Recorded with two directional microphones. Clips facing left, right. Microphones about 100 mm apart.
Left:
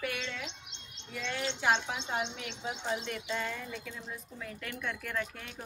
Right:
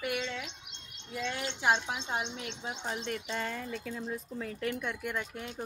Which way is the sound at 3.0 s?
35° right (ahead or behind).